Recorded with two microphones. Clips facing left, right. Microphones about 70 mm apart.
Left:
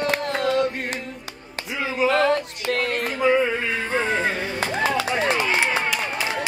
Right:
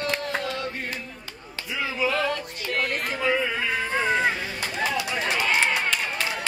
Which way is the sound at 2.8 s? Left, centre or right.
Centre.